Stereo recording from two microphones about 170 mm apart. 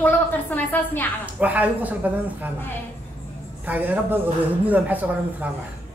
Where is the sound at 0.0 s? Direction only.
10° left (ahead or behind).